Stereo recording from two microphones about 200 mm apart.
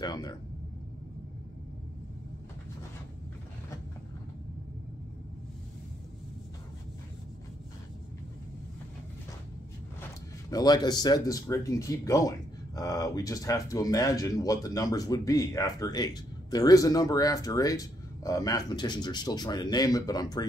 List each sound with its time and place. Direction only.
0.0 s speech: 20° left (ahead or behind)
10.5 s speech: 20° left (ahead or behind)